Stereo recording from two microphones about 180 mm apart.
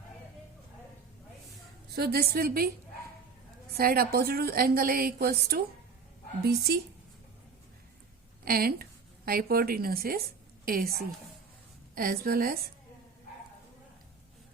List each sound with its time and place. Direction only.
2.0 s a woman's voice: 60° right (ahead or behind)
3.8 s a woman's voice: 55° right (ahead or behind)
8.4 s a woman's voice: 55° right (ahead or behind)